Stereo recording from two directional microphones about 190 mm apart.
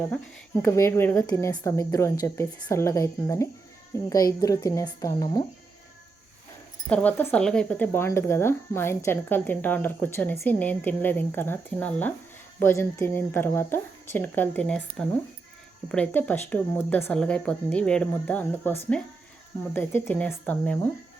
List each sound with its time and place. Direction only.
0.6 s speech: 15° left (ahead or behind)
6.9 s speech: 10° left (ahead or behind)
15.9 s speech: 10° left (ahead or behind)